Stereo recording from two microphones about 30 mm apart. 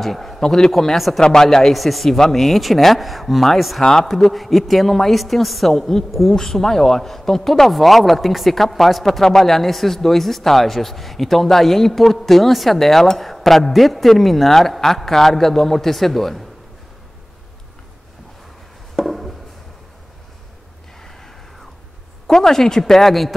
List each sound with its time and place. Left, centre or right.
0.0 s a man's voice: centre
1.2 s speech: centre
1.7 s a woman's voice: centre
18.9 s a sound: centre
22.3 s a man's voice: centre